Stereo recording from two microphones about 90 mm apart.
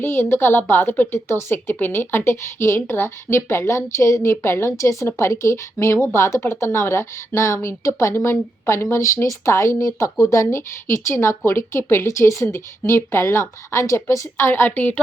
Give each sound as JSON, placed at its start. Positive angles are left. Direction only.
{"t": 0.0, "sound": "a woman's voice", "side_deg": 25}